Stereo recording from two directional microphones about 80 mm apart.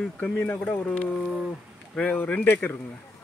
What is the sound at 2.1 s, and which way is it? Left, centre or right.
Speech, left.